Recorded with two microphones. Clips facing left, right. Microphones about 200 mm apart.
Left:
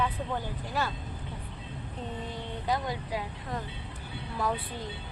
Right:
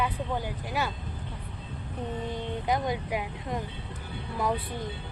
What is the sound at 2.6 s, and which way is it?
Speech, 20° right (ahead or behind).